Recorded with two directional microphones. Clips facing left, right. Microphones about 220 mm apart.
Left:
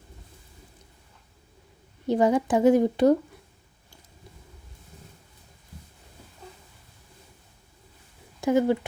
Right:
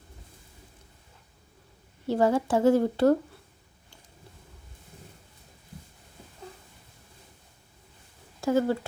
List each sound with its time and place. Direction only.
2.0 s a woman's voice: 15° left (ahead or behind)
8.4 s speech: 20° left (ahead or behind)